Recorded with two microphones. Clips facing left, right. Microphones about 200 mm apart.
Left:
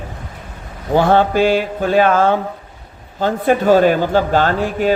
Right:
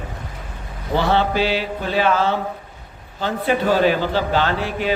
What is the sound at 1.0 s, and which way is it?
A man's voice, 50° left (ahead or behind).